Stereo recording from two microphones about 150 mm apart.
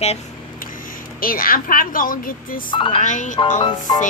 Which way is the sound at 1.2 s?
70° left (ahead or behind).